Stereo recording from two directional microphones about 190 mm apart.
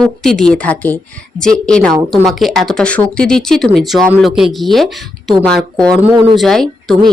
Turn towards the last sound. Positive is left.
turn(degrees=0)  # may be behind; listen again after turning